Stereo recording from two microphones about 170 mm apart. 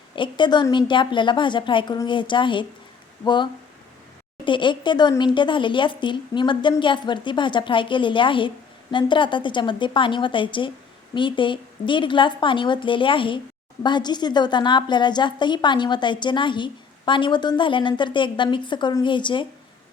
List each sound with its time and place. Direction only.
0.2 s speech: 25° left (ahead or behind)